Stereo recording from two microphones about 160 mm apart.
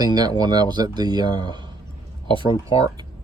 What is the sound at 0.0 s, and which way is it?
Speech, 25° right (ahead or behind).